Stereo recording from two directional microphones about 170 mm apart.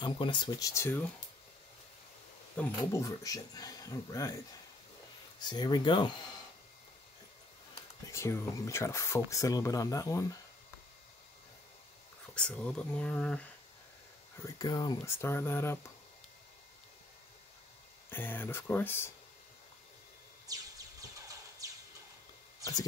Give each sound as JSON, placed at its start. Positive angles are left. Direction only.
{"t": 0.0, "sound": "speech", "side_deg": 30}
{"t": 2.6, "sound": "speech", "side_deg": 5}
{"t": 2.9, "sound": "speech", "side_deg": 20}
{"t": 5.4, "sound": "speech", "side_deg": 25}
{"t": 8.1, "sound": "speech", "side_deg": 15}
{"t": 12.4, "sound": "speech", "side_deg": 5}
{"t": 14.4, "sound": "speech", "side_deg": 25}
{"t": 18.1, "sound": "speech", "side_deg": 10}
{"t": 20.4, "sound": "a sound", "side_deg": -20}